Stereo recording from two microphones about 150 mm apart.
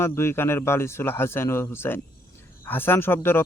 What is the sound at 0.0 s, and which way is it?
A man's voice, 15° left (ahead or behind).